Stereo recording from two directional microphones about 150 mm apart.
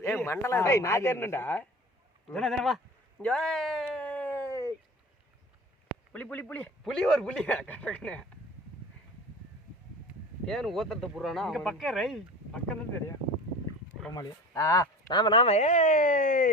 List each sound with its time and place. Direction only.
0.0 s speech: 15° left (ahead or behind)
2.3 s speech: centre (ahead or behind)
3.8 s a sound: 10° left (ahead or behind)
6.1 s speech: 10° left (ahead or behind)
10.4 s speech: centre (ahead or behind)
14.1 s speech: 25° left (ahead or behind); by 16.5 s 65° left (ahead or behind)